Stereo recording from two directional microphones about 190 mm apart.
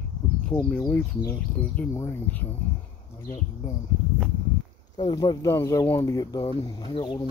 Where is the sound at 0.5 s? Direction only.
5° left (ahead or behind).